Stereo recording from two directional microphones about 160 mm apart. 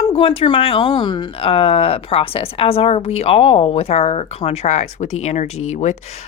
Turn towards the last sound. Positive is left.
turn(degrees=45)  # may be behind; listen again after turning